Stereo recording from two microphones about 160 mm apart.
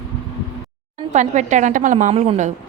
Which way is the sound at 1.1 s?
50° right (ahead or behind).